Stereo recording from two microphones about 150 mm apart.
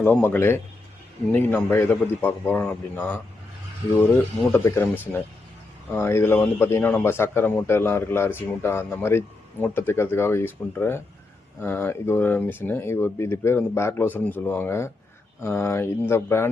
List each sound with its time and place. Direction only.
0.0 s speech: 15° left (ahead or behind)
4.5 s speech: 15° left (ahead or behind)